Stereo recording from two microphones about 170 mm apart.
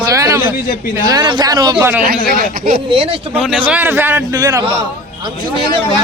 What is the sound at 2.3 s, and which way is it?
Speech, 60° right (ahead or behind).